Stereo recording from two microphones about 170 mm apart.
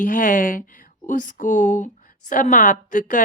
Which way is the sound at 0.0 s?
50° left (ahead or behind).